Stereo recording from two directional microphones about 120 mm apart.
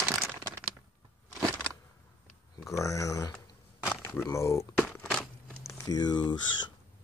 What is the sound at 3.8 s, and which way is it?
Speech, 15° left (ahead or behind).